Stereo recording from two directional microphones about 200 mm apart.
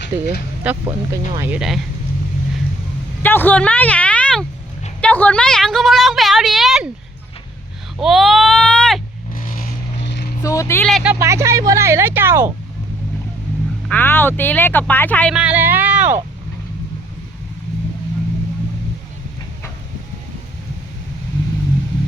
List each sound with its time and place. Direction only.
0.1 s speech: 15° right (ahead or behind)
3.2 s a woman's voice: 10° left (ahead or behind)
7.9 s speech: centre (ahead or behind)
9.3 s vehicle: 45° left (ahead or behind)
10.4 s speech: 15° left (ahead or behind)
10.8 s speech: centre (ahead or behind)
13.8 s speech: 10° left (ahead or behind)
15.4 s speech: 5° right (ahead or behind)